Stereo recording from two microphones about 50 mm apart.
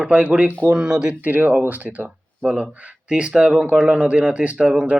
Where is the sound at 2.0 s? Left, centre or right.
Centre.